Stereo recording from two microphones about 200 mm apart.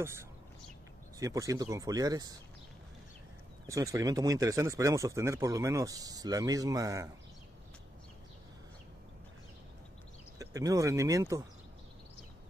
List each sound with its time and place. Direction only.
0.0 s speech: 15° right (ahead or behind)
3.6 s speech: 15° right (ahead or behind)
10.4 s speech: 15° right (ahead or behind)